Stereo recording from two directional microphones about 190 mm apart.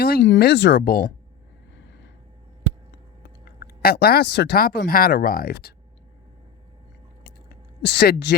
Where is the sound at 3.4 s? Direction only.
55° left (ahead or behind).